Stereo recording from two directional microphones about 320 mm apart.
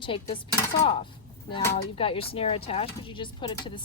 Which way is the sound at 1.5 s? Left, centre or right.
Centre.